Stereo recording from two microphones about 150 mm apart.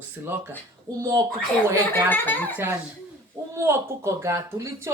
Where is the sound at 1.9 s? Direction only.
10° left (ahead or behind).